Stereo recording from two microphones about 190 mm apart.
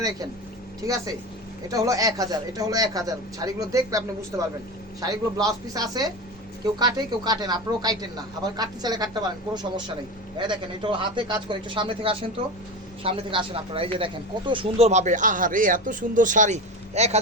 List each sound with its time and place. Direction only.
0.8 s a man's voice: 20° right (ahead or behind); by 17.2 s 35° right (ahead or behind)